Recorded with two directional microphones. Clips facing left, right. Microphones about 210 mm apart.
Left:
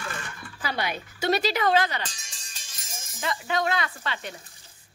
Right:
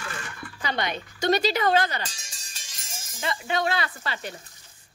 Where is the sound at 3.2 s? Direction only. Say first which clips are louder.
Even; 30° right (ahead or behind).